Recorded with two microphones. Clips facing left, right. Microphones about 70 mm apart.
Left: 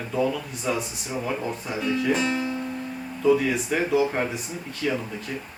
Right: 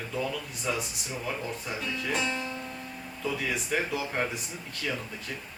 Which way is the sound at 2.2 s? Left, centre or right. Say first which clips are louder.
Left 7 dB; left.